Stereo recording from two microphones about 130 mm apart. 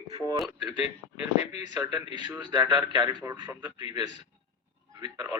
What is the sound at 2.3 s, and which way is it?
A man's voice, 30° right (ahead or behind).